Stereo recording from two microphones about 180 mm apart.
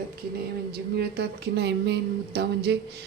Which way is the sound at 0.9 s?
60° right (ahead or behind).